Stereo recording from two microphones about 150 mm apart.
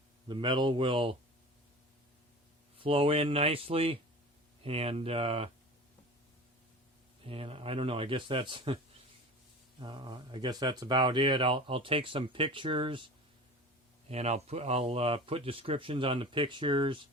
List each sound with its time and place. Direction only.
0.3 s speech: 30° right (ahead or behind)
2.8 s speech: 40° right (ahead or behind)
7.3 s speech: 40° right (ahead or behind)
9.8 s speech: 30° right (ahead or behind)
14.1 s speech: 45° right (ahead or behind)